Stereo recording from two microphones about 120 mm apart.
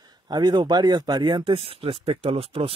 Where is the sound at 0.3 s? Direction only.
35° right (ahead or behind).